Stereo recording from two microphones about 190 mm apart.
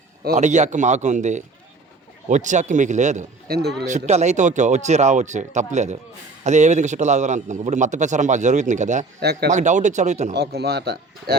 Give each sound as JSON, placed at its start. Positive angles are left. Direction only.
{"t": 0.3, "sound": "a man's voice", "side_deg": -40}
{"t": 3.5, "sound": "speech", "side_deg": -60}
{"t": 3.8, "sound": "a man's voice", "side_deg": -35}
{"t": 9.2, "sound": "speech", "side_deg": -60}
{"t": 9.5, "sound": "a man's voice", "side_deg": -40}
{"t": 10.3, "sound": "speech", "side_deg": -60}